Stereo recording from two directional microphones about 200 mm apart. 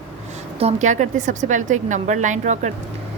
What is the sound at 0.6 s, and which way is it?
A woman's voice, 35° right (ahead or behind).